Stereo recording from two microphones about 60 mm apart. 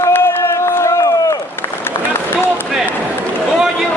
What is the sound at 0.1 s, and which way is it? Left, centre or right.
Run, left.